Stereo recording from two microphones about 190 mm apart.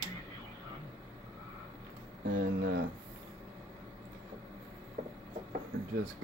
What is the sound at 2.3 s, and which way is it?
Speech, 50° right (ahead or behind).